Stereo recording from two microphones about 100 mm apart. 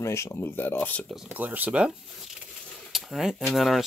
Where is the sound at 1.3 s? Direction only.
15° right (ahead or behind).